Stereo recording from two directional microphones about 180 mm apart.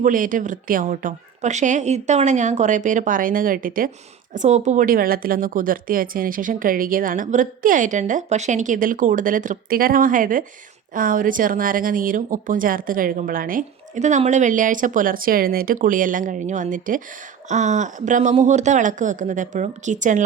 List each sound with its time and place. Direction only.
0.0 s a woman's voice: 50° right (ahead or behind)
4.4 s a woman's voice: 40° right (ahead or behind)